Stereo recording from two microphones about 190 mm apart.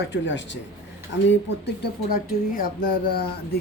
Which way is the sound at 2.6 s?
55° left (ahead or behind).